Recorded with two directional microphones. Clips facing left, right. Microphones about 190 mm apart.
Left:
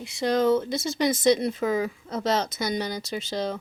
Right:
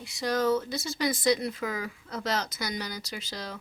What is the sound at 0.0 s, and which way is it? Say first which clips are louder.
Speech: left 5 dB; 25° left (ahead or behind).